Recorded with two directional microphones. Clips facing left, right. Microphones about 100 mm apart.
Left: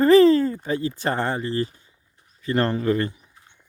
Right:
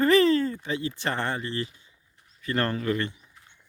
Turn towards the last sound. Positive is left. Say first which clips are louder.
# left 1 dB
turn(degrees=20)  # may be behind; listen again after turning